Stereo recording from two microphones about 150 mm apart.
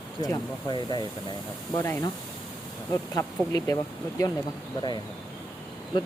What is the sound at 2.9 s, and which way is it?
Speech, 20° left (ahead or behind).